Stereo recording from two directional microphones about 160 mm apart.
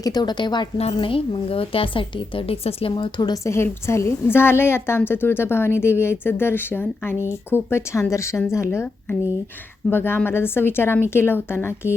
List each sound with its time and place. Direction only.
0.0 s a woman's voice: 25° left (ahead or behind)